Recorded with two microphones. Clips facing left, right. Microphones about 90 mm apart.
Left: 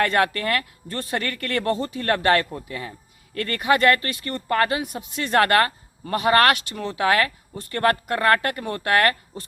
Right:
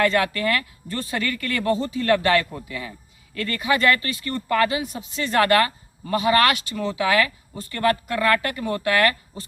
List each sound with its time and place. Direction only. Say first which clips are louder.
0.0 s speech: even; 50° left (ahead or behind)